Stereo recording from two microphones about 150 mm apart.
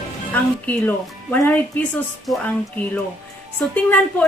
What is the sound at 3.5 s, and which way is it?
Speech, 10° left (ahead or behind).